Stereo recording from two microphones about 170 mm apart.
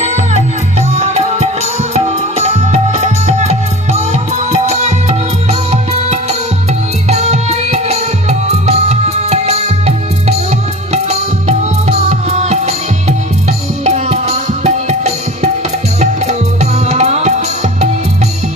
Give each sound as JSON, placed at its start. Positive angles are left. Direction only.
{"t": 0.0, "sound": "music", "side_deg": -40}